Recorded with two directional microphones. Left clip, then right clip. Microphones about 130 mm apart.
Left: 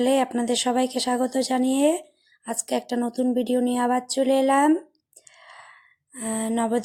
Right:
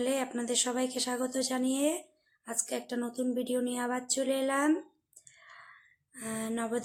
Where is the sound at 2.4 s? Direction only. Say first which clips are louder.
Left 9 dB; 55° left (ahead or behind).